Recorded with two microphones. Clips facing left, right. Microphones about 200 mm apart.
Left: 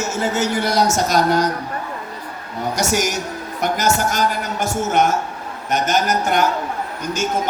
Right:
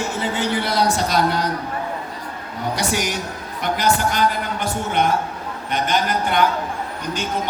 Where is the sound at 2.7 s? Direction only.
45° left (ahead or behind).